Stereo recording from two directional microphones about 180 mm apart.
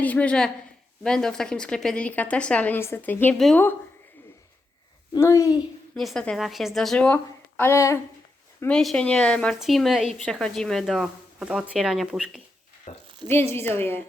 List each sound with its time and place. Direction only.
0.0 s a woman's voice: 10° left (ahead or behind)
5.1 s speech: 15° left (ahead or behind)
5.9 s a woman's voice: centre (ahead or behind)
8.6 s a woman's voice: 5° left (ahead or behind)
12.9 s a sound: 45° left (ahead or behind)
13.2 s speech: 15° left (ahead or behind)